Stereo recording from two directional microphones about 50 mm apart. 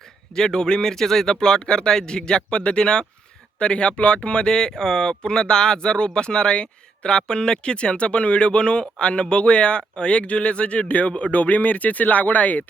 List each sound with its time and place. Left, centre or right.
0.3 s speech: centre; by 12.6 s left